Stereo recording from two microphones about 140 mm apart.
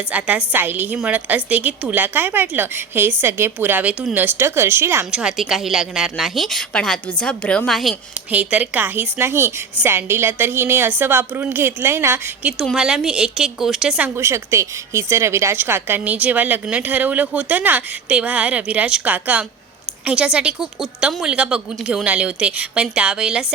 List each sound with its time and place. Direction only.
0.1 s a woman's voice: 10° right (ahead or behind)
5.1 s speech: 5° right (ahead or behind)
8.3 s a woman's voice: 10° right (ahead or behind)
14.2 s a woman's voice: 20° right (ahead or behind)